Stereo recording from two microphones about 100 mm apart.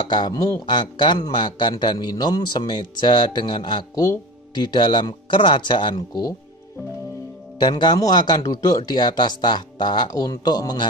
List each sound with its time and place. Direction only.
0.1 s speech: 40° left (ahead or behind)
0.7 s speech: 50° left (ahead or behind)
3.9 s speech: 35° left (ahead or behind); by 5.9 s 55° left (ahead or behind)
5.9 s speech: 40° left (ahead or behind)
7.5 s speech: 50° left (ahead or behind)